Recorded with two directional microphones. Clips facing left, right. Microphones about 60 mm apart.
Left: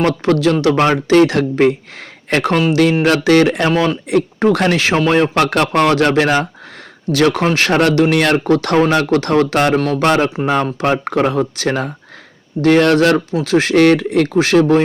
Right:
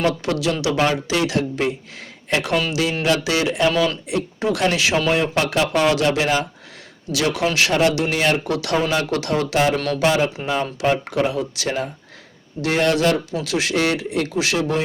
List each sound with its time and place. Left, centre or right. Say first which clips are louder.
0.0 s speech: left 7 dB; left
3.7 s speech: left 4 dB; left
4.1 s speech: left 8 dB; left
8.4 s speech: left 8 dB; left
10.9 s speech: left 6 dB; left
13.4 s speech: left 12 dB; left